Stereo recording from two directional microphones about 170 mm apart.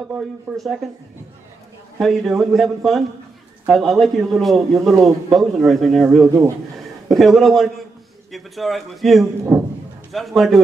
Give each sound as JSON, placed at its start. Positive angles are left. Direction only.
{"t": 0.1, "sound": "speech", "side_deg": -5}
{"t": 2.0, "sound": "speech", "side_deg": 0}
{"t": 6.2, "sound": "speech", "side_deg": -15}
{"t": 7.2, "sound": "speech", "side_deg": 0}
{"t": 9.5, "sound": "a sound", "side_deg": -10}
{"t": 10.1, "sound": "speech", "side_deg": 0}